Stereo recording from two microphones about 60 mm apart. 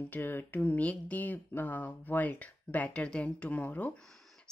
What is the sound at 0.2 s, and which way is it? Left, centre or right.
Speech, left.